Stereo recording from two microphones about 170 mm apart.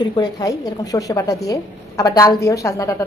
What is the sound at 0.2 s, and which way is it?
A woman's voice, 20° left (ahead or behind).